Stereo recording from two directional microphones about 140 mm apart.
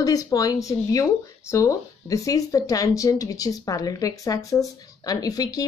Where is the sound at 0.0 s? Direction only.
25° left (ahead or behind).